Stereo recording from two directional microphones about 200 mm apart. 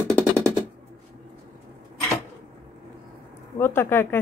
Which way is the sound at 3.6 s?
10° left (ahead or behind).